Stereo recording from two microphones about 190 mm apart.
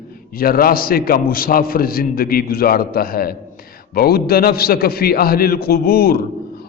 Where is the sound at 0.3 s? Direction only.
50° left (ahead or behind).